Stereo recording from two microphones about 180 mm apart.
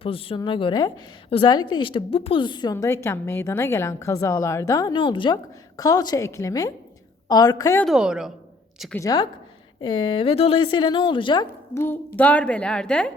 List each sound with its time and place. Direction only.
0.0 s a woman's voice: 30° left (ahead or behind)
7.9 s a woman's voice: 5° right (ahead or behind)
9.0 s a woman's voice: 20° left (ahead or behind)
11.7 s a woman's voice: 10° left (ahead or behind)